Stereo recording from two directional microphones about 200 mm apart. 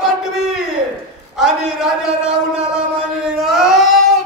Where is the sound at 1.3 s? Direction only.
Centre (ahead or behind).